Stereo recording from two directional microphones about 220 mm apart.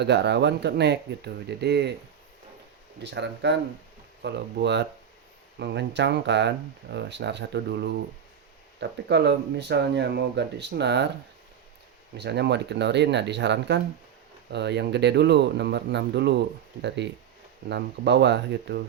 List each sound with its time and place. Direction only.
0.0 s speech: 50° right (ahead or behind)
3.0 s speech: 50° right (ahead or behind)
12.1 s speech: 50° right (ahead or behind)